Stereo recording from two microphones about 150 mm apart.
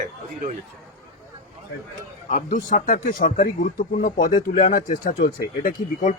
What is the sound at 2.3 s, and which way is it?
Speech, 60° left (ahead or behind).